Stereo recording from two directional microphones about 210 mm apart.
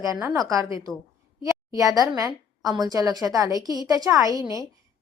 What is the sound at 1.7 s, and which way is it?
A woman's voice, 15° right (ahead or behind).